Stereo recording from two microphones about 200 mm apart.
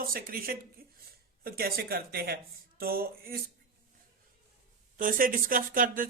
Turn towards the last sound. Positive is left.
turn(degrees=-45)  # may be behind; listen again after turning